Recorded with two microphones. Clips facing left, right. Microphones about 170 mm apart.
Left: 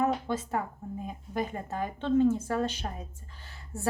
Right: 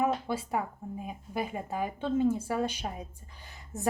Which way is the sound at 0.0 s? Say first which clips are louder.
Left 1 dB; 10° right (ahead or behind).